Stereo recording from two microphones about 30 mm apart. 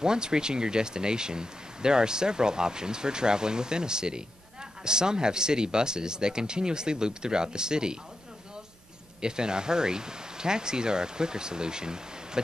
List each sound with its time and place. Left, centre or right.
0.0 s speech: right
9.2 s speech: right